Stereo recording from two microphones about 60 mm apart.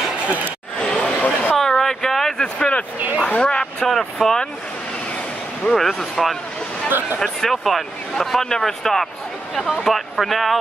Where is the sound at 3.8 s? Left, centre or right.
Centre.